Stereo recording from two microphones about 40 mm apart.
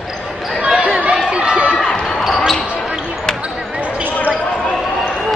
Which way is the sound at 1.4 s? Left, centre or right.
Right.